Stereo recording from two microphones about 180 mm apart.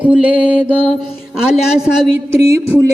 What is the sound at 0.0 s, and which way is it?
Mantra, 5° right (ahead or behind).